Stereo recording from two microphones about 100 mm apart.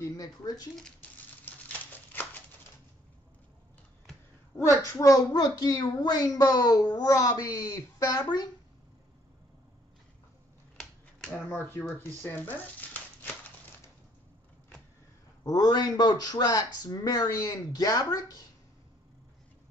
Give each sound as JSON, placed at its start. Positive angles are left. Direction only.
{"t": 0.0, "sound": "speech", "side_deg": 35}
{"t": 1.4, "sound": "a sound", "side_deg": 20}
{"t": 4.6, "sound": "a child's voice", "side_deg": 30}
{"t": 10.8, "sound": "a sound", "side_deg": 5}
{"t": 11.3, "sound": "speech", "side_deg": 20}
{"t": 15.4, "sound": "a child's voice", "side_deg": 40}